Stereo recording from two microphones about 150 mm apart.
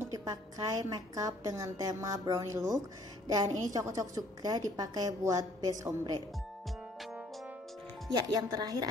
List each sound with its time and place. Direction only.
0.0 s a woman's voice: 20° right (ahead or behind)
8.1 s a woman's voice: 30° right (ahead or behind)